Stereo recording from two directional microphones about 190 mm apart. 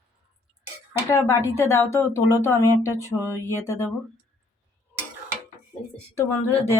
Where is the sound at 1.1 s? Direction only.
15° left (ahead or behind).